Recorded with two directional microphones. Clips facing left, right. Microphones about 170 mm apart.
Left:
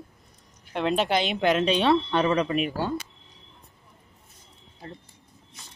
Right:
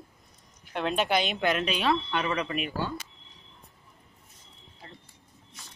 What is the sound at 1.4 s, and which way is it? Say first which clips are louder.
Speech: left 5 dB; 30° left (ahead or behind).